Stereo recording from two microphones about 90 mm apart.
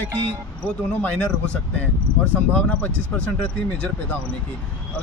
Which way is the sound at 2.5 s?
15° left (ahead or behind).